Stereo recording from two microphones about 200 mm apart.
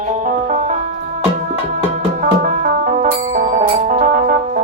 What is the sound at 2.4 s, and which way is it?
Music, 40° right (ahead or behind).